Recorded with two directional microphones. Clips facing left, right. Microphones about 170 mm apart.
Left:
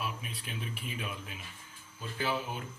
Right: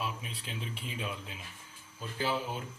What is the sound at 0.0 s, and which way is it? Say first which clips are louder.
A man's voice: right 1 dB; 25° right (ahead or behind).